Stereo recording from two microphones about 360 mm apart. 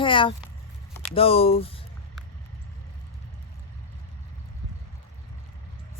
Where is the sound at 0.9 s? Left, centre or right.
Centre.